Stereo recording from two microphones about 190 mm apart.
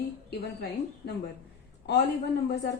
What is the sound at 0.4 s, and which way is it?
Speech, 60° left (ahead or behind).